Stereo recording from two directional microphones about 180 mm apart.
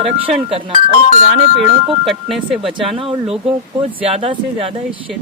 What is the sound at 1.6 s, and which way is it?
Speech, centre (ahead or behind).